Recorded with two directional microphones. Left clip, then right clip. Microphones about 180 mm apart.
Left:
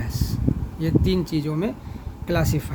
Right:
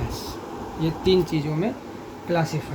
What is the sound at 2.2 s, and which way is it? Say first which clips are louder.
Speech: right 1 dB; 60° left (ahead or behind).